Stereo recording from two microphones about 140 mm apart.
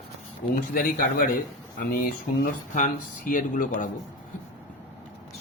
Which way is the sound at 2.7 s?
70° left (ahead or behind).